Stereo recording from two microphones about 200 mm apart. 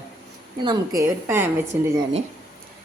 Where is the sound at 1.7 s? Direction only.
10° right (ahead or behind).